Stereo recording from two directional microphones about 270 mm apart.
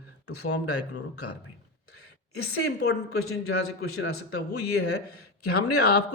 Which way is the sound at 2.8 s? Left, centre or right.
Left.